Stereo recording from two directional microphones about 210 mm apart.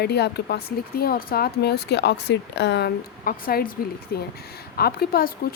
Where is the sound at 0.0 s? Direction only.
50° left (ahead or behind).